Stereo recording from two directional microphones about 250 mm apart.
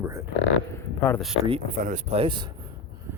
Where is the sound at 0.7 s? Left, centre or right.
Centre.